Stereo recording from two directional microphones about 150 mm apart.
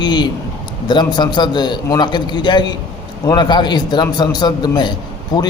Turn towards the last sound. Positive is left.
turn(degrees=25)  # may be behind; listen again after turning